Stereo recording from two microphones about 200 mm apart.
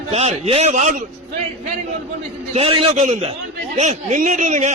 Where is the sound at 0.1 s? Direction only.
30° right (ahead or behind).